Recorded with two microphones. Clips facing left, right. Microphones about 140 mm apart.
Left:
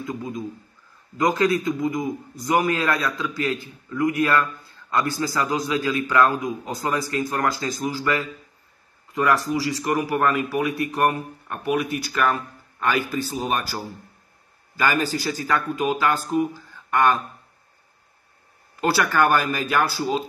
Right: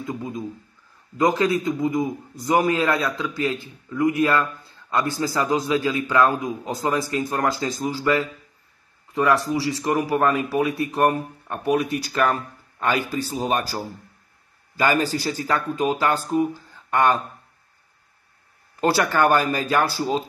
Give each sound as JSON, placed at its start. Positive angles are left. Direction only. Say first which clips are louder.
{"t": 0.0, "sound": "a man's voice", "louder": "even", "side_deg": -25}
{"t": 15.0, "sound": "a man's voice", "louder": "right 1 dB", "side_deg": -30}
{"t": 18.8, "sound": "a man's voice", "louder": "right 1 dB", "side_deg": -25}
{"t": 19.9, "sound": "speech", "louder": "right 1 dB", "side_deg": -35}